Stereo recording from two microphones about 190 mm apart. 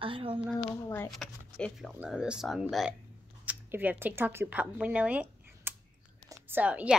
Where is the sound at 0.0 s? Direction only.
25° right (ahead or behind).